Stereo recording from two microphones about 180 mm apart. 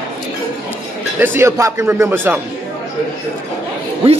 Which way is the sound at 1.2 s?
15° right (ahead or behind).